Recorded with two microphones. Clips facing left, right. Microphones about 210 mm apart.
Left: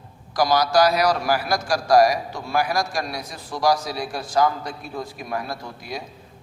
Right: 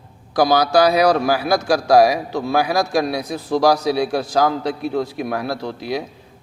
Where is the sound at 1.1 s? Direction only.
65° right (ahead or behind).